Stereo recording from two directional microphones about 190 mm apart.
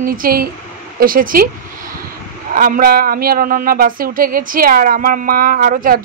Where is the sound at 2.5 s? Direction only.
45° right (ahead or behind).